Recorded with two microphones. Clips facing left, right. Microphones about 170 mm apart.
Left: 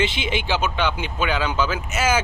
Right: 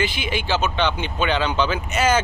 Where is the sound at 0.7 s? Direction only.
10° left (ahead or behind).